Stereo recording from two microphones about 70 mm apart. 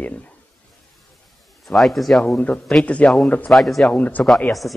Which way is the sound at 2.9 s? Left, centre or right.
Centre.